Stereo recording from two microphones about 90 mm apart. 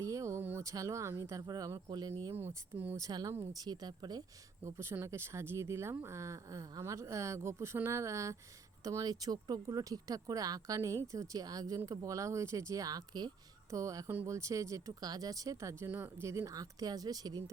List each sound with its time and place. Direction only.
0.0 s a sound: 35° right (ahead or behind)
0.6 s speech: 40° right (ahead or behind)
2.3 s speech: 25° right (ahead or behind)
2.9 s speech: 45° right (ahead or behind)
4.6 s speech: 30° right (ahead or behind); by 13.3 s 50° right (ahead or behind)
13.7 s speech: 35° right (ahead or behind)